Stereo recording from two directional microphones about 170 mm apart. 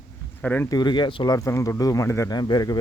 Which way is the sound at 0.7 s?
25° left (ahead or behind).